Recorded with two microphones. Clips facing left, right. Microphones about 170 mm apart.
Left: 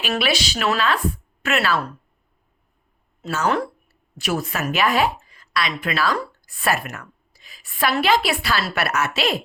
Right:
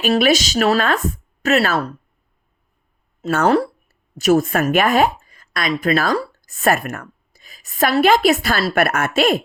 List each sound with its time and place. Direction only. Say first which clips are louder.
0.1 s speech: right 7 dB; 45° right (ahead or behind)
3.2 s speech: right 6 dB; 45° right (ahead or behind)